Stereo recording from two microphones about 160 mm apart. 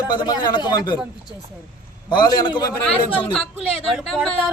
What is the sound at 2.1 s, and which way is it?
Speech, 25° left (ahead or behind).